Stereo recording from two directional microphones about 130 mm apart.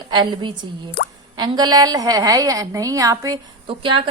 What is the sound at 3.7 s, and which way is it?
Speech, 40° right (ahead or behind).